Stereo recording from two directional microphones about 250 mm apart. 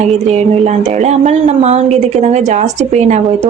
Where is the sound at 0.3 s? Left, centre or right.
Right.